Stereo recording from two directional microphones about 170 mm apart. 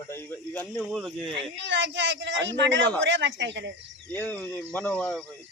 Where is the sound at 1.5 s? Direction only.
90° right.